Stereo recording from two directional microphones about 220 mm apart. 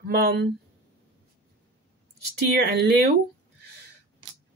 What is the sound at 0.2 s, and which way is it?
Speech, 45° right (ahead or behind).